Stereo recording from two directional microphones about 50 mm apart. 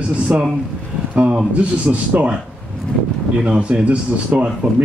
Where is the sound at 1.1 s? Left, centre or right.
Right.